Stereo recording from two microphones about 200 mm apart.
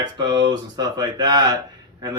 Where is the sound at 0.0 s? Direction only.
20° right (ahead or behind).